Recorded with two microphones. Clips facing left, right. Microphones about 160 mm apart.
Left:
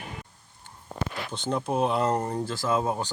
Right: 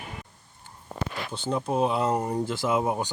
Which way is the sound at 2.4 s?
20° right (ahead or behind).